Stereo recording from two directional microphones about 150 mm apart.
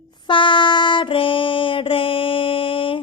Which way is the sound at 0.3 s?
35° left (ahead or behind).